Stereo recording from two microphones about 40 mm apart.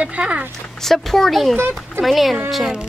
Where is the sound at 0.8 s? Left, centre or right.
Centre.